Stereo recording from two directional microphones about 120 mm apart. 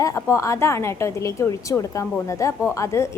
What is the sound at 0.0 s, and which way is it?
A woman's voice, 25° left (ahead or behind).